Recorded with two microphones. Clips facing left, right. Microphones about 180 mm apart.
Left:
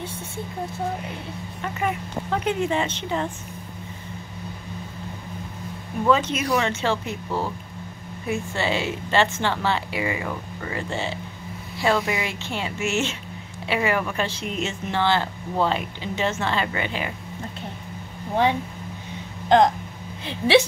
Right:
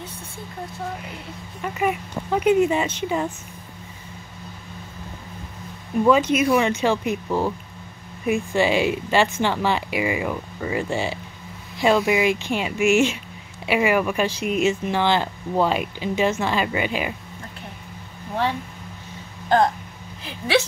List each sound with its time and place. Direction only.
1.6 s speech: 15° right (ahead or behind)
6.0 s speech: 10° right (ahead or behind)
20.2 s speech: 25° left (ahead or behind)